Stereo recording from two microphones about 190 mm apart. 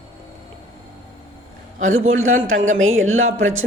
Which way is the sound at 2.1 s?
90° right.